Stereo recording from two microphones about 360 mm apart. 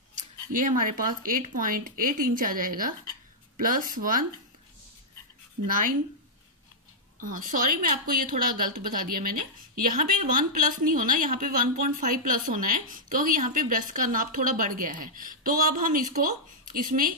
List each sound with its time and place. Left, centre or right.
0.5 s a woman's voice: right
7.2 s a woman's voice: right